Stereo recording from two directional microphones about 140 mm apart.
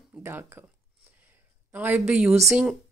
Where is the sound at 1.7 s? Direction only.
10° right (ahead or behind).